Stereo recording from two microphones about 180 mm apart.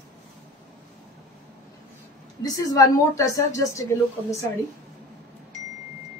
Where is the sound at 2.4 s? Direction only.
20° left (ahead or behind).